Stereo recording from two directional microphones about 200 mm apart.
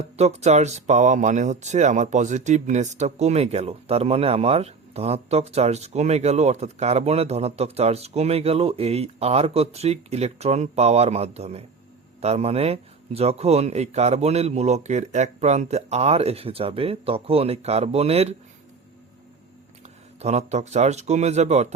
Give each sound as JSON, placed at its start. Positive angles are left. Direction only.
{"t": 0.0, "sound": "speech", "side_deg": -35}
{"t": 20.1, "sound": "speech", "side_deg": -35}